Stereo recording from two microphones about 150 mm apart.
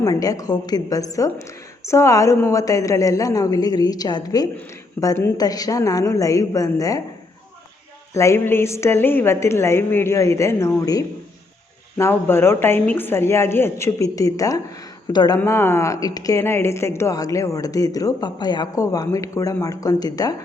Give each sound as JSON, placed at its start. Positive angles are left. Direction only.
{"t": 0.0, "sound": "speech", "side_deg": 25}
{"t": 8.1, "sound": "a woman's voice", "side_deg": 20}
{"t": 15.4, "sound": "speech", "side_deg": 15}